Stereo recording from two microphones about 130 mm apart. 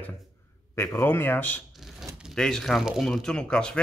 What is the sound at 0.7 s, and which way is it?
Speech, 20° left (ahead or behind).